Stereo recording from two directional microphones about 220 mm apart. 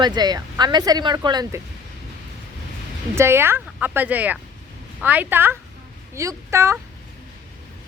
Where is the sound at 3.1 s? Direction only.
10° right (ahead or behind).